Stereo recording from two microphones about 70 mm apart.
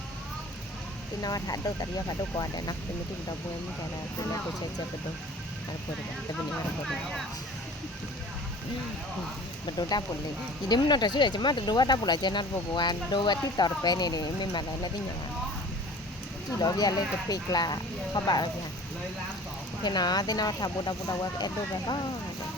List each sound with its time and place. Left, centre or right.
1.2 s speech: left
10.7 s speech: left
16.6 s speech: left
19.8 s speech: left